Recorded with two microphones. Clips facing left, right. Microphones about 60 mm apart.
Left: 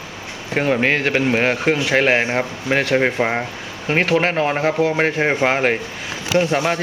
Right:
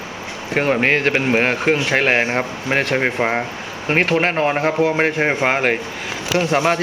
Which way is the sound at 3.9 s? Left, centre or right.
Right.